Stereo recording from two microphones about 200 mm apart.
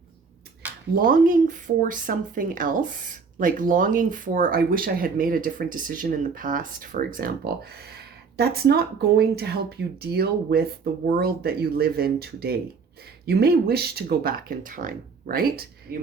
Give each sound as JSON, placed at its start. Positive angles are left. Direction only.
{"t": 0.9, "sound": "speech", "side_deg": -45}